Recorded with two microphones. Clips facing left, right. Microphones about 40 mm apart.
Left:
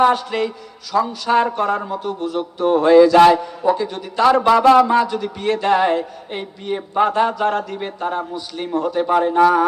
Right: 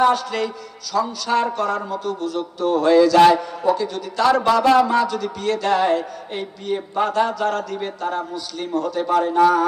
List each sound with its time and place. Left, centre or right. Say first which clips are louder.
0.0 s a man's voice: left 2 dB; left